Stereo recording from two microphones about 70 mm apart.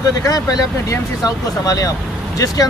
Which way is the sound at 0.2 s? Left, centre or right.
Left.